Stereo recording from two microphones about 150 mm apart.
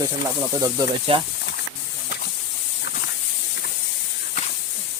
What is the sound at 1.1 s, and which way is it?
Speech, 40° right (ahead or behind).